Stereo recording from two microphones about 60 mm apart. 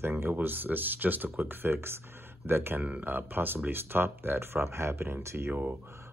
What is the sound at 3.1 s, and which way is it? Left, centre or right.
Speech, right.